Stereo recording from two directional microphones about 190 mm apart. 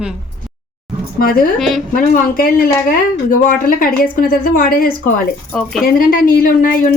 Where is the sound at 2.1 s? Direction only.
50° left (ahead or behind).